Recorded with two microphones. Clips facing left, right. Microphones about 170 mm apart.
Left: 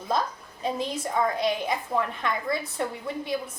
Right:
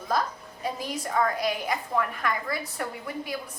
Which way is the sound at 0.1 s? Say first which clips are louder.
Even; 25° left (ahead or behind).